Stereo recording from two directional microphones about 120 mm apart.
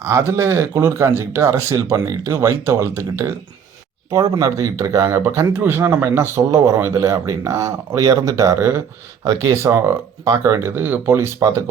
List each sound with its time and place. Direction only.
0.0 s speech: 25° right (ahead or behind)